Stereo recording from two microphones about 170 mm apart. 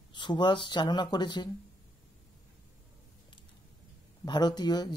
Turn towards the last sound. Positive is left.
turn(degrees=25)  # may be behind; listen again after turning